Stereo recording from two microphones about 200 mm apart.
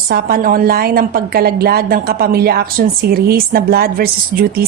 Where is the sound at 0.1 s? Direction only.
50° right (ahead or behind).